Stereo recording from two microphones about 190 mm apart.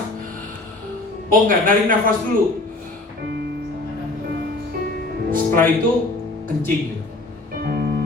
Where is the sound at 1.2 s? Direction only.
45° right (ahead or behind).